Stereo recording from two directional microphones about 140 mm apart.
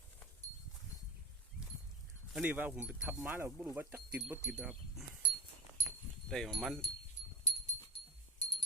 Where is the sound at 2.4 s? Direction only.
15° right (ahead or behind).